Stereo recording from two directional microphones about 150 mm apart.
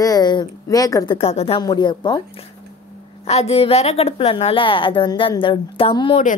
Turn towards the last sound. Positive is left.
turn(degrees=35)  # may be behind; listen again after turning